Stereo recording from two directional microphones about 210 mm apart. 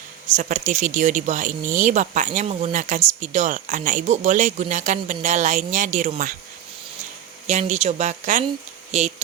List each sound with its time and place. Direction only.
0.3 s speech: 35° right (ahead or behind)
7.4 s speech: 35° right (ahead or behind)